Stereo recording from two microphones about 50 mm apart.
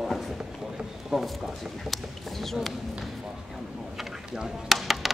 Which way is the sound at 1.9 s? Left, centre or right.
Centre.